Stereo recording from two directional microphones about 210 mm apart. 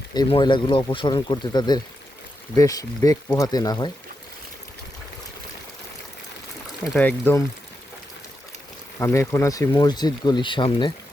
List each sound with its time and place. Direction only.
0.1 s speech: 20° left (ahead or behind)
6.9 s speech: 10° left (ahead or behind)
9.0 s speech: 15° left (ahead or behind)